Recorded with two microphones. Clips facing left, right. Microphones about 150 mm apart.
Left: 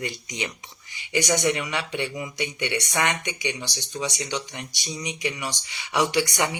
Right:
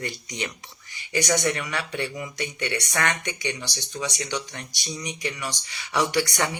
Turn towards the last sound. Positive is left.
turn(degrees=15)  # may be behind; listen again after turning